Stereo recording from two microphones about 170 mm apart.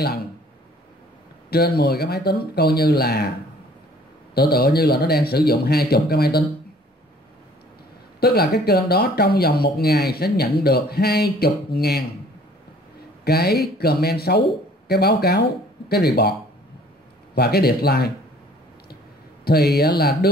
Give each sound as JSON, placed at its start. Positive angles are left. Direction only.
{"t": 1.5, "sound": "speech", "side_deg": 70}
{"t": 4.4, "sound": "speech", "side_deg": 65}
{"t": 8.2, "sound": "speech", "side_deg": 65}
{"t": 13.2, "sound": "speech", "side_deg": 65}
{"t": 17.4, "sound": "speech", "side_deg": 70}
{"t": 19.4, "sound": "speech", "side_deg": 70}